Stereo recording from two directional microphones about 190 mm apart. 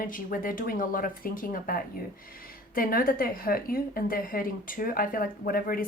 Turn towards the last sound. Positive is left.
turn(degrees=50)  # may be behind; listen again after turning